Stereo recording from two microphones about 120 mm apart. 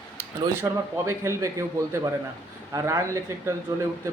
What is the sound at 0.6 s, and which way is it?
A man's voice, 25° right (ahead or behind).